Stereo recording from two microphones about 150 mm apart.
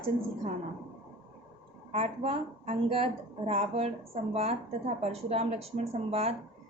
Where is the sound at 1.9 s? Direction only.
40° right (ahead or behind).